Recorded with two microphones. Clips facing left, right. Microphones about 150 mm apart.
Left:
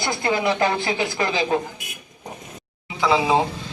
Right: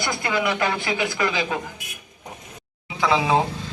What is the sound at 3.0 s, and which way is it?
Speech, 25° left (ahead or behind).